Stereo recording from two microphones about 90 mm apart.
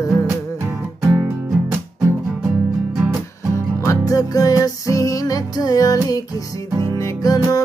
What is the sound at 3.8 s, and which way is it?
Music, 35° left (ahead or behind).